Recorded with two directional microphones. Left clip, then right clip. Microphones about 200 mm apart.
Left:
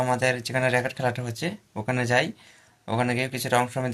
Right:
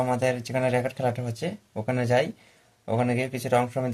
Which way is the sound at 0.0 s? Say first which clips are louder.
Left 1 dB; centre (ahead or behind).